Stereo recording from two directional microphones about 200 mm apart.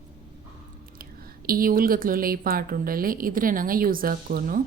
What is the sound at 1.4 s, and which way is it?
Speech, 45° right (ahead or behind).